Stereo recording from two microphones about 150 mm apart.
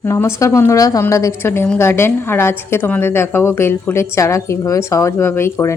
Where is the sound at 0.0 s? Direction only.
15° left (ahead or behind).